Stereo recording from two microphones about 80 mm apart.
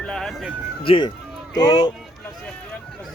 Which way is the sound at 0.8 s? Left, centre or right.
Left.